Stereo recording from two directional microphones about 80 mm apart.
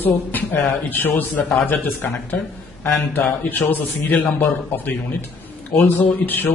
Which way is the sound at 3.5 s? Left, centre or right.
Left.